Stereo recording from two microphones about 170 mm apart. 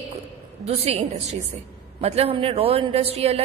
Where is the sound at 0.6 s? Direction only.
40° right (ahead or behind).